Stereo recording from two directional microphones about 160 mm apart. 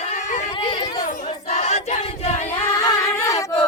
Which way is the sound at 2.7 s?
20° left (ahead or behind).